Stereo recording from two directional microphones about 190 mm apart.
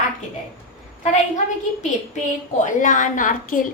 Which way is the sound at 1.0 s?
40° left (ahead or behind).